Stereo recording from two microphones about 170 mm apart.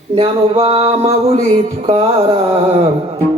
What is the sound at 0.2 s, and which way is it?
A man's voice, 35° right (ahead or behind).